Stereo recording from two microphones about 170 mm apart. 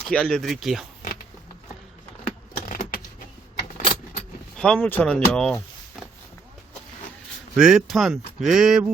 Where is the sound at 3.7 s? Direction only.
45° left (ahead or behind).